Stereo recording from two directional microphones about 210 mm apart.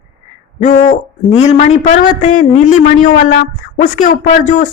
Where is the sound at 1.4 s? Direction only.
35° left (ahead or behind).